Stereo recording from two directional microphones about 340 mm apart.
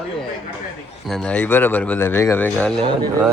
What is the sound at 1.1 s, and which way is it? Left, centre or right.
Speech, centre.